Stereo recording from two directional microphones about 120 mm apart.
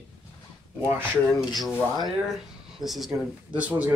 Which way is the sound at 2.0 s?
Centre (ahead or behind).